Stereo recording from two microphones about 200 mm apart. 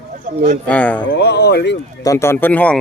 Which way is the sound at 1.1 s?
55° left (ahead or behind).